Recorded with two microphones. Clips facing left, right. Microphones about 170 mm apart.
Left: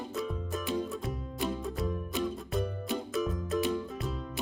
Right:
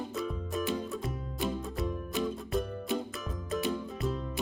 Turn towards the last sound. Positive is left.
turn(degrees=0)  # may be behind; listen again after turning